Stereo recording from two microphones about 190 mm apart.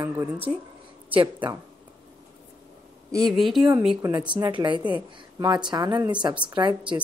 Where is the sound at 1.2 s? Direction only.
25° right (ahead or behind).